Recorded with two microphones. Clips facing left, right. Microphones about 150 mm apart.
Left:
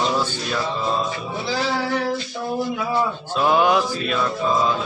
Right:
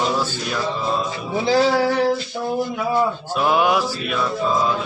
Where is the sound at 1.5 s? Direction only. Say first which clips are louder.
Right 7 dB; 45° right (ahead or behind).